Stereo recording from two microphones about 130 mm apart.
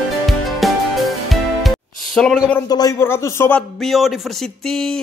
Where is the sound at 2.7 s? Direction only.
30° left (ahead or behind).